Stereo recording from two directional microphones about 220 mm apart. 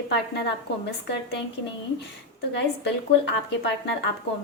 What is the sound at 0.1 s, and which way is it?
Speech, 50° left (ahead or behind).